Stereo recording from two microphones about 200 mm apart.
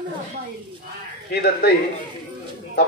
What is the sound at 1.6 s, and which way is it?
Speech, 55° left (ahead or behind).